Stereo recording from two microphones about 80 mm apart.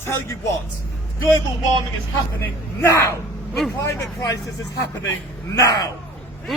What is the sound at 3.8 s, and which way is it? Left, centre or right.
Speech, left.